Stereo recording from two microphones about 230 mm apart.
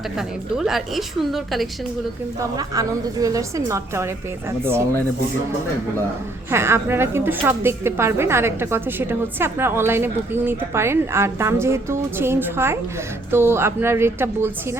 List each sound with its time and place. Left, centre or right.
0.2 s a woman's voice: centre
2.6 s a woman's voice: centre
6.5 s a woman's voice: centre